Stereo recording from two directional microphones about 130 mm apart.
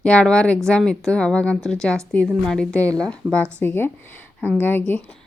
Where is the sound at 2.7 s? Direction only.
25° right (ahead or behind).